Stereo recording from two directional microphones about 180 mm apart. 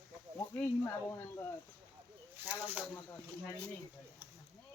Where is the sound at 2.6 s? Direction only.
10° right (ahead or behind).